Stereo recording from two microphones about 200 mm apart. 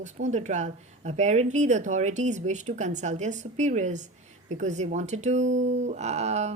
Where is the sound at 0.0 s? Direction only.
35° right (ahead or behind).